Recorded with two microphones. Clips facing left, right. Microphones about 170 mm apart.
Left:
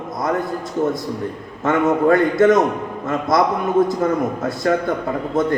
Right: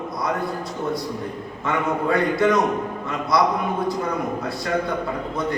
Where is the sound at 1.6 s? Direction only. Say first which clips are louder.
Left 7 dB; 45° left (ahead or behind).